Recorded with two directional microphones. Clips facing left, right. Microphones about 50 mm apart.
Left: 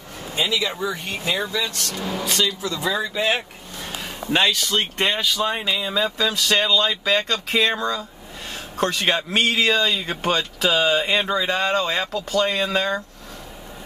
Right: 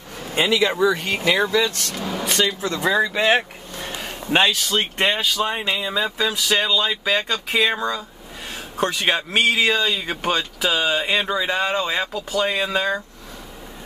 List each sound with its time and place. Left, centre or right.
0.3 s speech: right
1.4 s speech: right
2.0 s speech: centre
2.2 s speech: right
2.7 s speech: right
4.0 s a sound: right
4.9 s speech: right